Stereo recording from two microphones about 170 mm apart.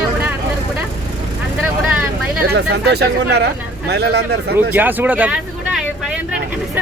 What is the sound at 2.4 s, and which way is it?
Speech, 75° right (ahead or behind).